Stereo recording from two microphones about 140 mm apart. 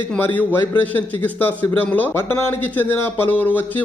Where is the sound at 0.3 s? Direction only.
15° left (ahead or behind).